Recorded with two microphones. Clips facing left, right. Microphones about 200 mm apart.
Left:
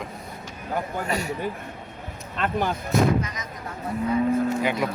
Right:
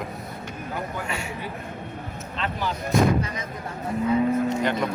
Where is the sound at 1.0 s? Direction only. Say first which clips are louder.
Left 4 dB; 40° left (ahead or behind).